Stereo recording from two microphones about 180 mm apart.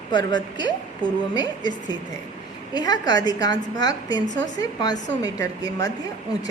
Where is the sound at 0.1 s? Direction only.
25° left (ahead or behind).